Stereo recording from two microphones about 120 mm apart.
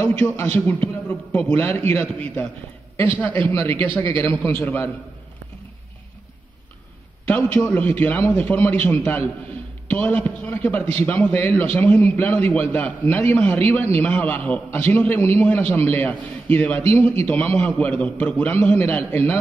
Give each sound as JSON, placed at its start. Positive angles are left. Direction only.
{"t": 0.0, "sound": "a man's voice", "side_deg": 20}
{"t": 7.2, "sound": "a man's voice", "side_deg": 15}